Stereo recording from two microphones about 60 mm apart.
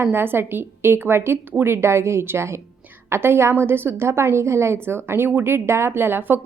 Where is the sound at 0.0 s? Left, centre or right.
Right.